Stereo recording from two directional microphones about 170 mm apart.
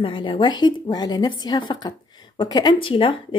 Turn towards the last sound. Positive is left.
turn(degrees=30)  # may be behind; listen again after turning